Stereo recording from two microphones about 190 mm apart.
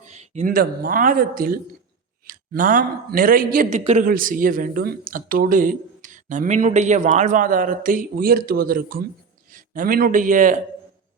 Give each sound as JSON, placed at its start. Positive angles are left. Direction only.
{"t": 0.1, "sound": "a man's voice", "side_deg": -35}